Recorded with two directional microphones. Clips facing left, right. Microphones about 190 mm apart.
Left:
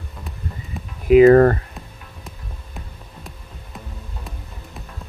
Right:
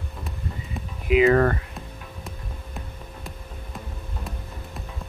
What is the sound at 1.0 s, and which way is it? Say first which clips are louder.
Speech: left 8 dB; 40° left (ahead or behind).